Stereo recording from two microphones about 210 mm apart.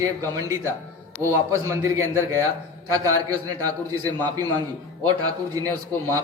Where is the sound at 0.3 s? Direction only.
15° right (ahead or behind).